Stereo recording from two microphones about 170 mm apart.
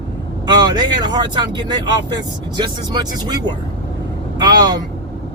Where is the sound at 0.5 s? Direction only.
25° right (ahead or behind).